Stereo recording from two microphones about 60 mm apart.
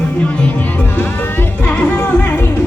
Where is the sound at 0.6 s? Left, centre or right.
Left.